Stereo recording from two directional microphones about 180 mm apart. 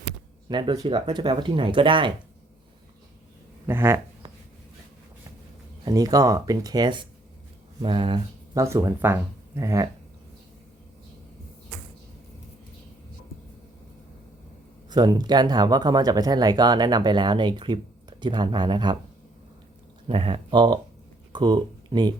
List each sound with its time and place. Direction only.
0.4 s speech: 25° right (ahead or behind)
3.7 s speech: 15° right (ahead or behind)
5.8 s speech: 20° right (ahead or behind)
14.8 s speech: 20° right (ahead or behind)
20.1 s speech: 30° right (ahead or behind)